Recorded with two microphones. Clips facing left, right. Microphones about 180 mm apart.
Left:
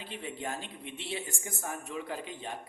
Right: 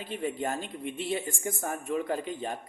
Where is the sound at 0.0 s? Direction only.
45° right (ahead or behind).